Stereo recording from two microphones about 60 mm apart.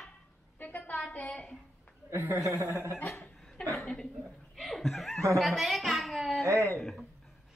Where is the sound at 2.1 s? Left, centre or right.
Right.